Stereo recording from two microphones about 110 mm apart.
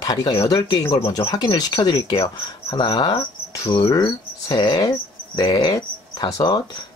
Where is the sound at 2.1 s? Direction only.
55° left (ahead or behind).